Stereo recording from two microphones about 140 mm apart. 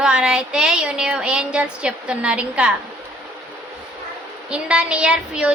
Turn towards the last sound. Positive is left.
turn(degrees=-5)  # may be behind; listen again after turning